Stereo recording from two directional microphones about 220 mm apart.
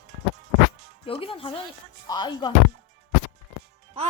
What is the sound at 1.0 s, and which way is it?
Speech, 25° left (ahead or behind).